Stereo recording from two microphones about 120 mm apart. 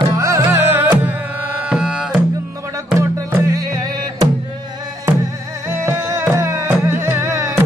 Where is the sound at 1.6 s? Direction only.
5° right (ahead or behind).